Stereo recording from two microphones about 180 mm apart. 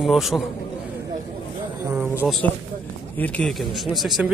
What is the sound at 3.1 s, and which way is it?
Speech, 5° left (ahead or behind).